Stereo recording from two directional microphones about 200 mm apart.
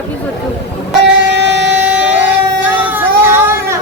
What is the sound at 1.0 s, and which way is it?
Vehicle, 60° right (ahead or behind).